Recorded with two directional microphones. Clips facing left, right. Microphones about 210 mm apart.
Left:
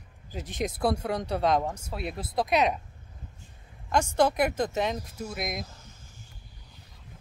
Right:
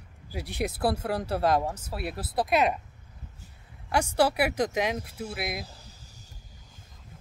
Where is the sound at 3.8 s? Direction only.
10° right (ahead or behind).